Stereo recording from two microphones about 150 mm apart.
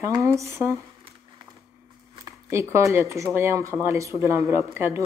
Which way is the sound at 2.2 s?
20° right (ahead or behind).